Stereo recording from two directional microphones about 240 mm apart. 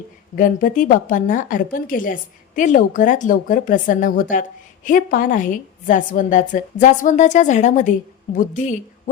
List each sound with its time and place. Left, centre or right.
0.3 s a woman's voice: left